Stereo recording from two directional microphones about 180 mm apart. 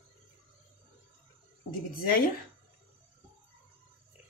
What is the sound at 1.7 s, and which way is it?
Speech, 55° left (ahead or behind).